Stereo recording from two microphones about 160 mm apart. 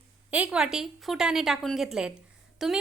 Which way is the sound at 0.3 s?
10° right (ahead or behind).